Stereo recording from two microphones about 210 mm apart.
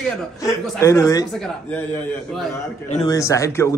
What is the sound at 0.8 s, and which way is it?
Speech, 15° left (ahead or behind).